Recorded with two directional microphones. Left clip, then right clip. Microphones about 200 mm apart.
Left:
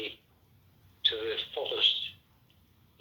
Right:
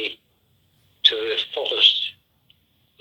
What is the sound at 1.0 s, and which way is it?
Radio, 45° right (ahead or behind).